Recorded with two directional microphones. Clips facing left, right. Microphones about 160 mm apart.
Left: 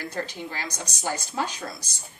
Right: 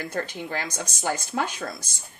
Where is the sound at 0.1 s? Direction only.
50° right (ahead or behind).